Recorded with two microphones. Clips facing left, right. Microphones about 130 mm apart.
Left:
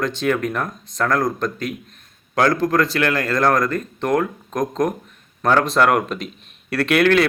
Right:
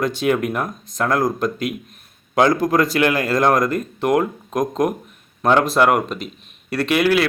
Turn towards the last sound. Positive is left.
turn(degrees=-5)  # may be behind; listen again after turning